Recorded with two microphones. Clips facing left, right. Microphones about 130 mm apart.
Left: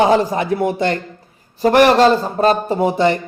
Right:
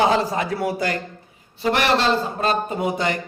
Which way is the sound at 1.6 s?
45° left (ahead or behind).